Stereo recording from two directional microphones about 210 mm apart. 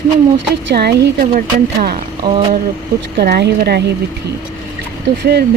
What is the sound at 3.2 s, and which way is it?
Speech, 50° right (ahead or behind).